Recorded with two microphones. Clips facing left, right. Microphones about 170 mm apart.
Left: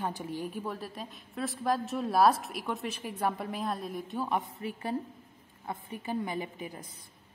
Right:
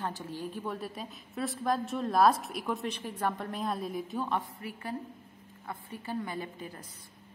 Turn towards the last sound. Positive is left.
turn(degrees=15)  # may be behind; listen again after turning